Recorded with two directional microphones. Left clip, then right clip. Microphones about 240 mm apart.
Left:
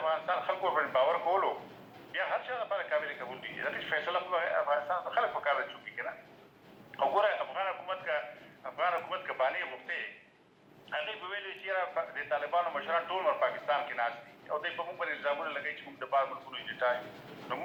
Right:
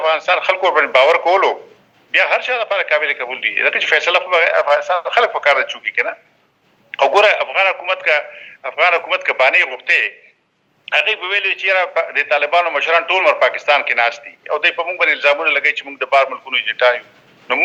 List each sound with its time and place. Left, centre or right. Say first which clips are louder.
0.0 s a man's voice: right 17 dB; right